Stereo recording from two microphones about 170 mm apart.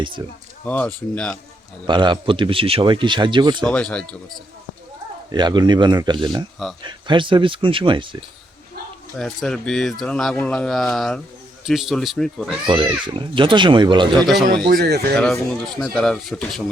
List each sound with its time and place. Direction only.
0.6 s speech: 10° left (ahead or behind)
1.9 s speech: 25° right (ahead or behind)
3.6 s speech: 5° left (ahead or behind)
5.3 s speech: 25° right (ahead or behind)
9.1 s speech: centre (ahead or behind)
12.6 s speech: 30° right (ahead or behind)
14.2 s speech: centre (ahead or behind)
14.6 s speech: 65° right (ahead or behind)
15.1 s speech: 5° left (ahead or behind)